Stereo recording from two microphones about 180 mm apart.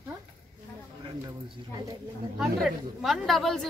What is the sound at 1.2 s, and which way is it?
Speech, 25° right (ahead or behind).